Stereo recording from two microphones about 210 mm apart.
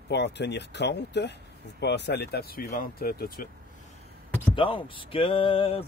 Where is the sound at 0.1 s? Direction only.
55° left (ahead or behind).